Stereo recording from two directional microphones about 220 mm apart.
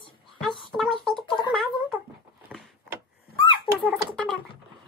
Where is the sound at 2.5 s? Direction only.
Centre (ahead or behind).